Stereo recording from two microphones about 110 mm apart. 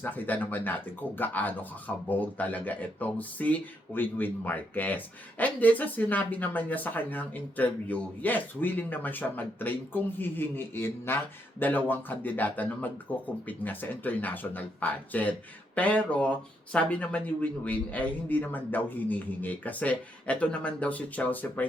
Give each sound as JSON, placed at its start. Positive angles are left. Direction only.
{"t": 0.0, "sound": "speech", "side_deg": 15}